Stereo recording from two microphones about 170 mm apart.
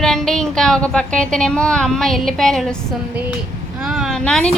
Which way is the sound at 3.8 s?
Centre (ahead or behind).